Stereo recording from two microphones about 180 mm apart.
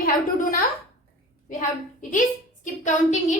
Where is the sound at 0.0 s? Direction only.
50° left (ahead or behind).